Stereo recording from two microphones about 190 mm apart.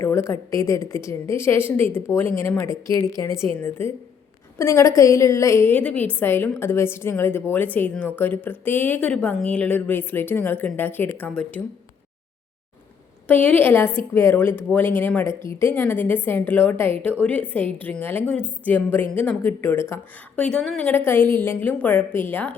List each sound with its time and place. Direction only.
0.0 s a woman's voice: 15° left (ahead or behind)
13.2 s a woman's voice: 10° left (ahead or behind)